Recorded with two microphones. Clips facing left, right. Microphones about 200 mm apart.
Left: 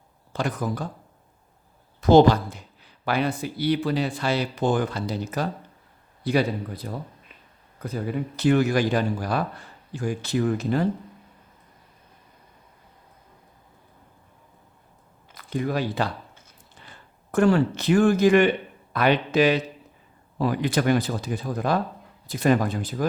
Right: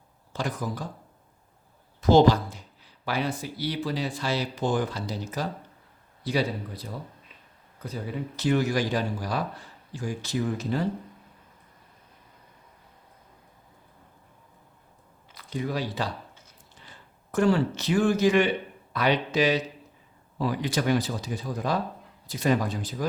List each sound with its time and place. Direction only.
0.3 s speech: 60° left (ahead or behind)
2.0 s speech: 55° left (ahead or behind)
15.4 s speech: 55° left (ahead or behind)
17.3 s speech: 55° left (ahead or behind)